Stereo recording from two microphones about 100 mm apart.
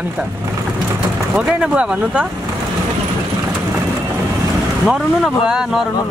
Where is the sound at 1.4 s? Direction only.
10° right (ahead or behind).